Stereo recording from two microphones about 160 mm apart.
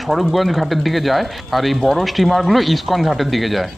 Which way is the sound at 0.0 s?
Centre (ahead or behind).